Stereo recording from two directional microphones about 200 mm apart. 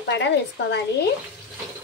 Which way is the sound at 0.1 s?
60° left (ahead or behind).